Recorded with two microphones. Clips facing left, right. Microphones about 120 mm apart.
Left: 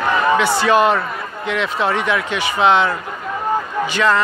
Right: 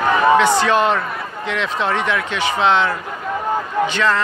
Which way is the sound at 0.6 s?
5° left (ahead or behind).